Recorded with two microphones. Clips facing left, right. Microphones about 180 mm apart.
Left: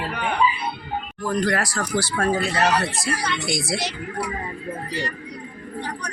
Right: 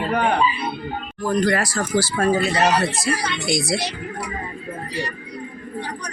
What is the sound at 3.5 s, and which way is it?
Speech, centre (ahead or behind).